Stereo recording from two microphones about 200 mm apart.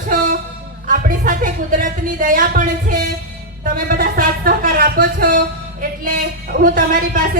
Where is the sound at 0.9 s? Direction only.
45° right (ahead or behind).